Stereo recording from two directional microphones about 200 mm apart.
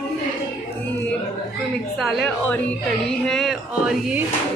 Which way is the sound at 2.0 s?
5° left (ahead or behind).